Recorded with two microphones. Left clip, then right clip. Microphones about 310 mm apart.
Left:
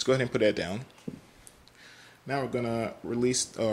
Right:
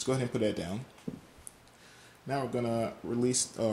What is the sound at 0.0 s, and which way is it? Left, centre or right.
Speech, centre.